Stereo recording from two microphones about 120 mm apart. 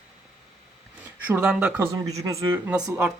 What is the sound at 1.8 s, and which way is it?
Speech, 30° right (ahead or behind).